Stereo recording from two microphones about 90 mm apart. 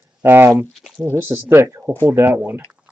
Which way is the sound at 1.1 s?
25° right (ahead or behind).